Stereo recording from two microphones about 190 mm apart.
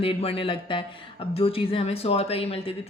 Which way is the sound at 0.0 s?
30° left (ahead or behind).